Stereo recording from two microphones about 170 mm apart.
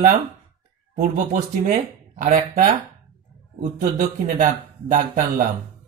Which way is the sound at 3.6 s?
50° right (ahead or behind).